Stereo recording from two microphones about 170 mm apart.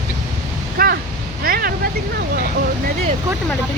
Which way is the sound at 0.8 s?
55° right (ahead or behind).